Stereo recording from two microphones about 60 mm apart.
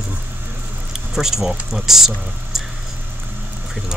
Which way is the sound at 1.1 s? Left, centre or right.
Centre.